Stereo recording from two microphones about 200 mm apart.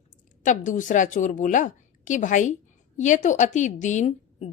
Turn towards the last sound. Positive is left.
turn(degrees=30)  # may be behind; listen again after turning